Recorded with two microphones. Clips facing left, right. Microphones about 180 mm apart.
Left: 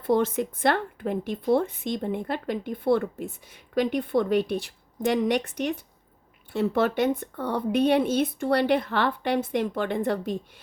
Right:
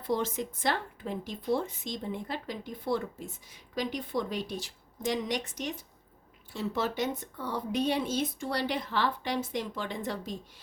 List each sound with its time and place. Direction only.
0.0 s a woman's voice: 55° left (ahead or behind)